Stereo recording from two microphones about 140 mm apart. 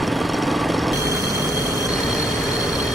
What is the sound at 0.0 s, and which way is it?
Jackhammer, centre (ahead or behind).